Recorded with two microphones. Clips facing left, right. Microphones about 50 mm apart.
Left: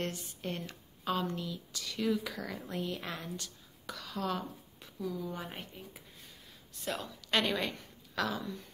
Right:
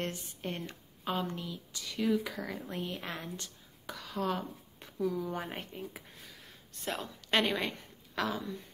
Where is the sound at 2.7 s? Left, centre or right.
Right.